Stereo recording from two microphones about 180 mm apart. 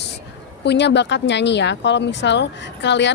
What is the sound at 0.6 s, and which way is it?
Speech, 70° left (ahead or behind).